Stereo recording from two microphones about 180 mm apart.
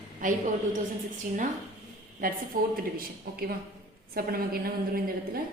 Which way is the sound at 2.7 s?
55° right (ahead or behind).